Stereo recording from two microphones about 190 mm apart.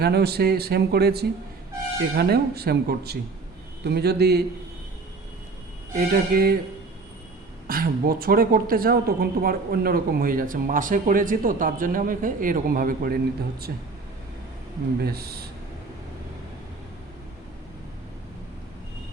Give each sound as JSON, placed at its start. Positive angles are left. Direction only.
{"t": 0.0, "sound": "speech", "side_deg": -55}
{"t": 6.0, "sound": "speech", "side_deg": -50}
{"t": 7.7, "sound": "speech", "side_deg": -50}
{"t": 15.0, "sound": "speech", "side_deg": -55}